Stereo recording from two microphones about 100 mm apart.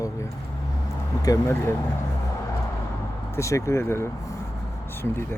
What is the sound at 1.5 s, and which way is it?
Speech, 30° left (ahead or behind).